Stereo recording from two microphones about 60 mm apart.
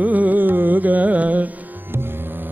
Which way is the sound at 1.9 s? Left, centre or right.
Right.